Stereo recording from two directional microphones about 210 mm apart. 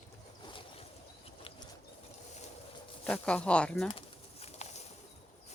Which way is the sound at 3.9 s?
25° left (ahead or behind).